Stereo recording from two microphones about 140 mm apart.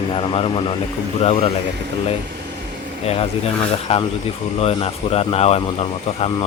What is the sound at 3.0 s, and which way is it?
Speech, 45° left (ahead or behind).